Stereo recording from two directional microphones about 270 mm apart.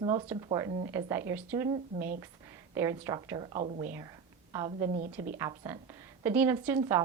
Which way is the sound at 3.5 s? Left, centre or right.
Right.